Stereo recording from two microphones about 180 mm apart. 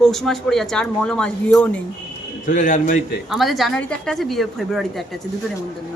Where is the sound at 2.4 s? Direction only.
45° left (ahead or behind).